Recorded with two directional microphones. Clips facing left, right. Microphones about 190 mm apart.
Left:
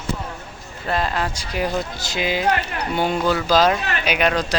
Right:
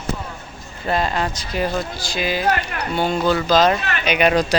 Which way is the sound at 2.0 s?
20° left (ahead or behind).